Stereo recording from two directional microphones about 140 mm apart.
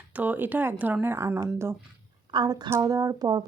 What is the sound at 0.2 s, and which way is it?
Speech, 15° right (ahead or behind).